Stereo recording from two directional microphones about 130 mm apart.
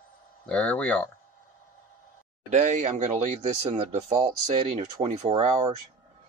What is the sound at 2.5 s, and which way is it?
Speech, 65° right (ahead or behind).